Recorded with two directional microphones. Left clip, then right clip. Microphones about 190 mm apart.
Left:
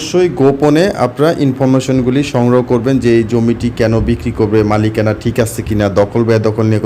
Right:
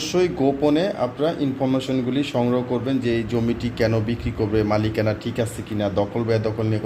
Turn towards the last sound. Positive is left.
turn(degrees=40)  # may be behind; listen again after turning